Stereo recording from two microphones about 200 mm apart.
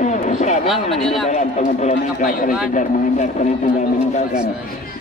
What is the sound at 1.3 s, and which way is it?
A man's voice, 35° left (ahead or behind).